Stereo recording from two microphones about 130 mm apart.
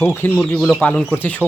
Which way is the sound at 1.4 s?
10° right (ahead or behind).